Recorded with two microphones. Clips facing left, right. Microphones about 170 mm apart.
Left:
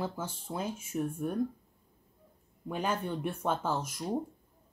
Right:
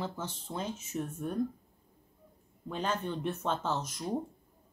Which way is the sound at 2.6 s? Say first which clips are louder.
Left 1 dB; 10° left (ahead or behind).